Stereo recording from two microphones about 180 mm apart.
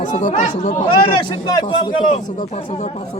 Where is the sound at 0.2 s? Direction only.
45° left (ahead or behind).